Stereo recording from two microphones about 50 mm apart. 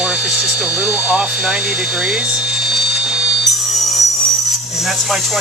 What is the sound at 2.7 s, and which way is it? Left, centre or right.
Vacuum cleaner, centre.